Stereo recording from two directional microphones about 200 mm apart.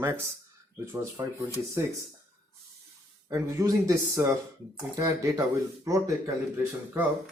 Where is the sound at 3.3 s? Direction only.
15° right (ahead or behind).